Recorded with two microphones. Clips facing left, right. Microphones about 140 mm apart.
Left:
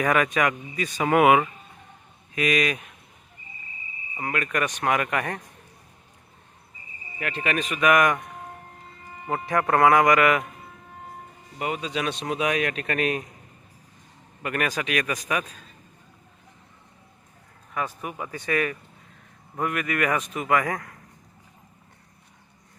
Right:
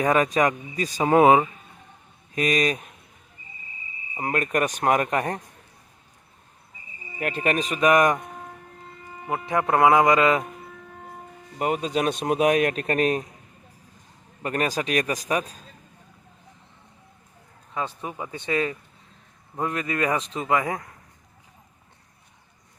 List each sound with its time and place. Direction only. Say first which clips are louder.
0.0 s speech: right 2 dB; 30° right (ahead or behind)
4.2 s speech: right 3 dB; 40° right (ahead or behind)
7.2 s speech: right 3 dB; 45° right (ahead or behind)
9.5 s a man's voice: right 1 dB; 20° right (ahead or behind)
11.6 s speech: right 4 dB; 45° right (ahead or behind)
14.4 s speech: right 2 dB; 35° right (ahead or behind)
17.7 s a man's voice: even; 25° right (ahead or behind)